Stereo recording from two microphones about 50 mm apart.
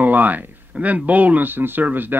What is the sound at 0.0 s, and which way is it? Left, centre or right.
Speech, right.